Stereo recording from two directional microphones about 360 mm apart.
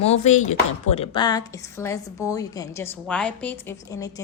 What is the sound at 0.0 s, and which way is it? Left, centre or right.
Chopping, centre.